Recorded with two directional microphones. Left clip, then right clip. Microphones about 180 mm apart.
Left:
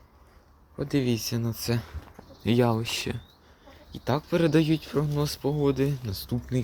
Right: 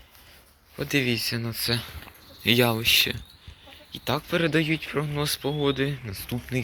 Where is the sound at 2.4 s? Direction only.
20° left (ahead or behind); by 4.9 s 35° left (ahead or behind).